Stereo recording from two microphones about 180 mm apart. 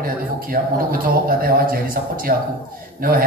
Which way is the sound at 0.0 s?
55° right (ahead or behind).